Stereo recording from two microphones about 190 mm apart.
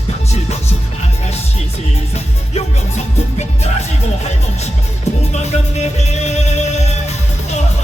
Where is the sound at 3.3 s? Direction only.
35° left (ahead or behind).